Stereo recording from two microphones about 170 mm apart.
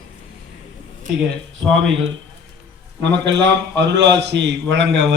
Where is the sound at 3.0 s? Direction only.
90° right.